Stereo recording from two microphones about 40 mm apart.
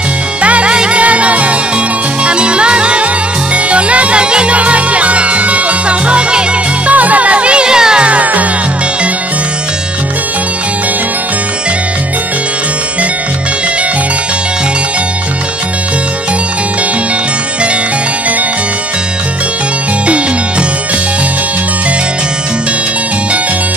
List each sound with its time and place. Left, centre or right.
0.4 s music: right
6.9 s music: right; by 8.1 s centre
8.1 s music: right